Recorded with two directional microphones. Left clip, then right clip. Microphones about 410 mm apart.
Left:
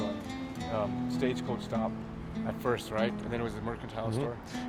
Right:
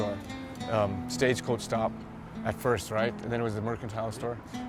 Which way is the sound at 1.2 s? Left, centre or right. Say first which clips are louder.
Right 8 dB; right.